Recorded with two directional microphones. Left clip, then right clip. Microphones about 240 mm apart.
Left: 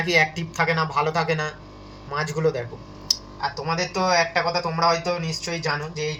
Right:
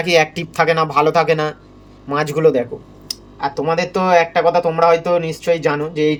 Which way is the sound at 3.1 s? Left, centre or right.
Right.